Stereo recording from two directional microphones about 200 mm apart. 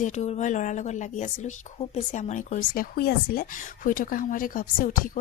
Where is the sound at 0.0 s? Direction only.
35° left (ahead or behind).